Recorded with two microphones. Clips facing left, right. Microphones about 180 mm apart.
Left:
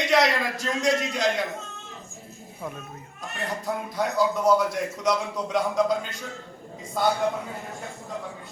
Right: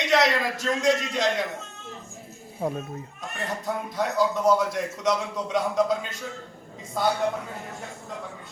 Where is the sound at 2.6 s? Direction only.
35° right (ahead or behind).